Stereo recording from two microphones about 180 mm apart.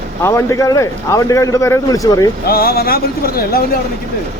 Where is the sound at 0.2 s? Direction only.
15° left (ahead or behind).